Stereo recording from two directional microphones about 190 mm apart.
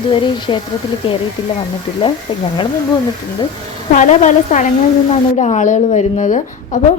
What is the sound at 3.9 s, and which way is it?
A woman's voice, 40° left (ahead or behind).